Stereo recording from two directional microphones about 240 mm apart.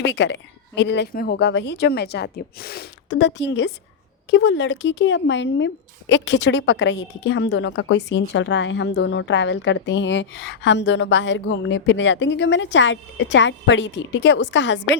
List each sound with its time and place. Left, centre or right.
0.0 s speech: left